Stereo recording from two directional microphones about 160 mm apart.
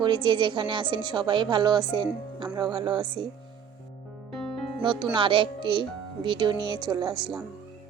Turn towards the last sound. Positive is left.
turn(degrees=-30)  # may be behind; listen again after turning